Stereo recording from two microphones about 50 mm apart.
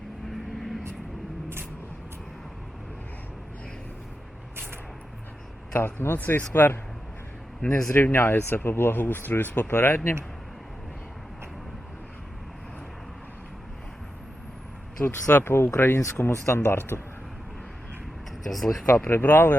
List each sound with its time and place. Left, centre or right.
0.3 s vehicle: centre
5.7 s speech: left
6.1 s speech: left
15.0 s speech: left
15.4 s speech: left
16.0 s speech: left
16.6 s speech: left
18.4 s speech: centre
18.9 s speech: left